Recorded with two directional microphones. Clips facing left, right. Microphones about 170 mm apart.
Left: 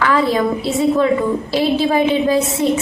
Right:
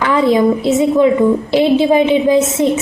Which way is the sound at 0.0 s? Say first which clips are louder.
Right 4 dB; 20° right (ahead or behind).